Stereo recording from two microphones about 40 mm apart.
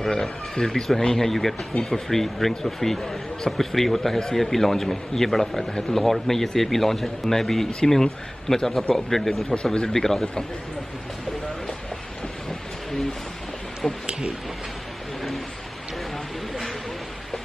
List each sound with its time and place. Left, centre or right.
0.0 s speech: centre
5.7 s speech: centre
5.9 s speech: centre
12.4 s a sound: centre
13.8 s speech: centre